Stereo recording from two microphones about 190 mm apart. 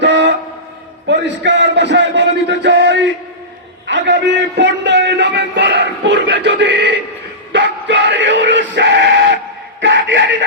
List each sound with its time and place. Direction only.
0.0 s train: 65° right (ahead or behind)
1.0 s a man's voice: 65° right (ahead or behind)
3.8 s a sound: 70° right (ahead or behind)
7.5 s music: 70° right (ahead or behind)
9.8 s chuckle: 70° right (ahead or behind)